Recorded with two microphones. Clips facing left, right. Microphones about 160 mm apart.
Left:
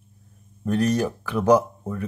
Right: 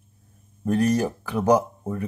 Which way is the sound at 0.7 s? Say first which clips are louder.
Right 1 dB; 10° right (ahead or behind).